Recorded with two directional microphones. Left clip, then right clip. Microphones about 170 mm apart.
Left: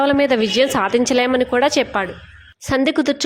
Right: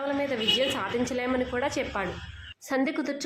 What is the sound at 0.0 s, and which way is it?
A woman's voice, 60° left (ahead or behind).